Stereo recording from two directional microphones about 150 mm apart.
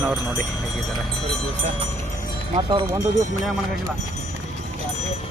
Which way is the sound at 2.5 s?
35° right (ahead or behind).